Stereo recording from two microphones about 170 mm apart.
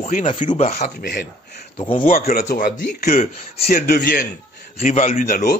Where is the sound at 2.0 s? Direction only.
55° left (ahead or behind).